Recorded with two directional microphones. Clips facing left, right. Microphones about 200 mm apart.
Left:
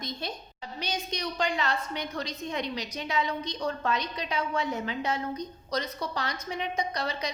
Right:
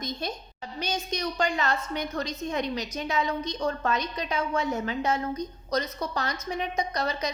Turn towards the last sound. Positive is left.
turn(degrees=-45)  # may be behind; listen again after turning